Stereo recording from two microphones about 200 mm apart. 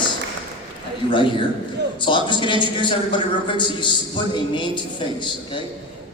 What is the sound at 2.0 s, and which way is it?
A man's voice, 25° left (ahead or behind).